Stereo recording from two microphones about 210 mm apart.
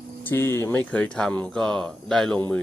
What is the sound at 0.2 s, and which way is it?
Speech, 10° left (ahead or behind).